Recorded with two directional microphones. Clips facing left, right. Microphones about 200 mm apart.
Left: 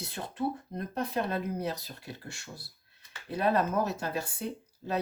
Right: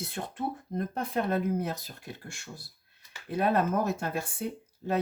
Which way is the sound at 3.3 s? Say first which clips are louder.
Right 1 dB; 50° right (ahead or behind).